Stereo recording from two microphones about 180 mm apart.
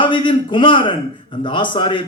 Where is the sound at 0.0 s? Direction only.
25° left (ahead or behind).